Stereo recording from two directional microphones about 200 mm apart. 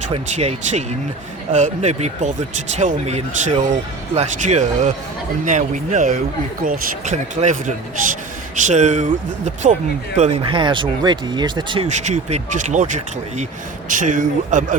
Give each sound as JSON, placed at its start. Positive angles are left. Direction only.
{"t": 0.1, "sound": "speech", "side_deg": -35}
{"t": 8.5, "sound": "speech", "side_deg": -35}
{"t": 11.9, "sound": "speech", "side_deg": -35}